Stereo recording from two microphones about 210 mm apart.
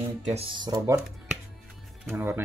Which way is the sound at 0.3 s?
25° right (ahead or behind).